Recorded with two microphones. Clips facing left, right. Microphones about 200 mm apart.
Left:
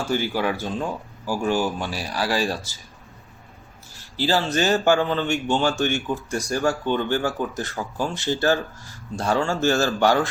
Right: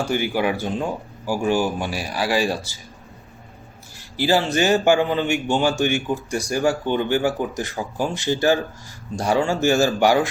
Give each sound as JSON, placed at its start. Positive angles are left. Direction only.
{"t": 0.0, "sound": "speech", "side_deg": -15}
{"t": 4.2, "sound": "speech", "side_deg": -15}